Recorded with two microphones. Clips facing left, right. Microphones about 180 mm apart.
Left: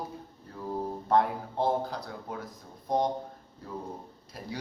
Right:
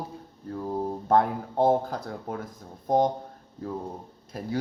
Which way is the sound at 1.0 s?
50° right (ahead or behind).